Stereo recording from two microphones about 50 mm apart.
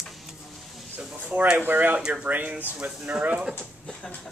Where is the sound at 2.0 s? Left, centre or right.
Centre.